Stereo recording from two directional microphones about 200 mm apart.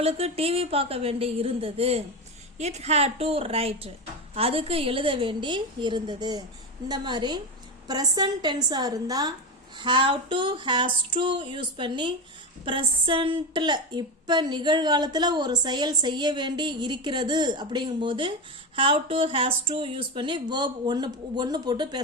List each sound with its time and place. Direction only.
0.0 s a woman's voice: 30° right (ahead or behind)